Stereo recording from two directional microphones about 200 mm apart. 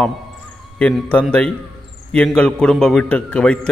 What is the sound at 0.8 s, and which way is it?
A man's voice, 5° left (ahead or behind).